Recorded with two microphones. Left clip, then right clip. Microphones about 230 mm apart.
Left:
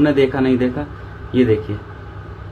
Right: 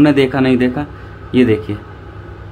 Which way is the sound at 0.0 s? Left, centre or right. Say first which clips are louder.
Right 3 dB; right.